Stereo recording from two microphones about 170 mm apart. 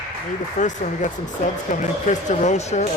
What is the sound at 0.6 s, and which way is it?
Speech, 50° left (ahead or behind).